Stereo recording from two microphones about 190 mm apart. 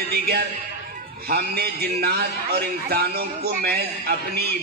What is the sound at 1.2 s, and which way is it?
A man's voice, 55° right (ahead or behind).